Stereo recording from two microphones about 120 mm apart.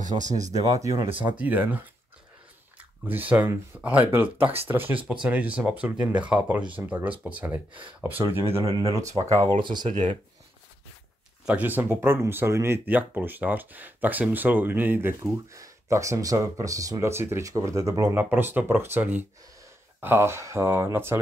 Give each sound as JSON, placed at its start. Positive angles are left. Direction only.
{"t": 0.2, "sound": "speech", "side_deg": -90}
{"t": 0.5, "sound": "speech", "side_deg": -30}
{"t": 1.4, "sound": "speech", "side_deg": -15}
{"t": 2.8, "sound": "speech", "side_deg": -15}
{"t": 8.5, "sound": "speech", "side_deg": -30}
{"t": 9.6, "sound": "speech", "side_deg": -40}
{"t": 9.8, "sound": "speech", "side_deg": -90}
{"t": 11.4, "sound": "speech", "side_deg": -15}
{"t": 18.1, "sound": "speech", "side_deg": -15}